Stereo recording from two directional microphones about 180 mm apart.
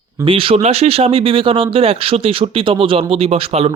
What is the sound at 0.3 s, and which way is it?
Speech, 30° right (ahead or behind).